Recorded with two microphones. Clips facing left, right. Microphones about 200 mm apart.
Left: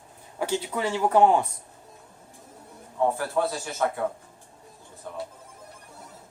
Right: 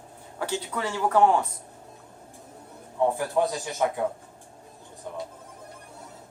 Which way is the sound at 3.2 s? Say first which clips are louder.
Right 1 dB; 15° right (ahead or behind).